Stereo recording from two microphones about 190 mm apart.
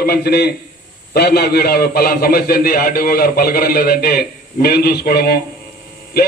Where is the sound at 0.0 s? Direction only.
55° left (ahead or behind).